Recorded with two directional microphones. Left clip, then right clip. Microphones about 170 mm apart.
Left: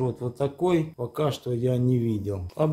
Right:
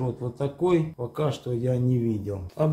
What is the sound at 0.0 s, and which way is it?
Speech, 45° left (ahead or behind).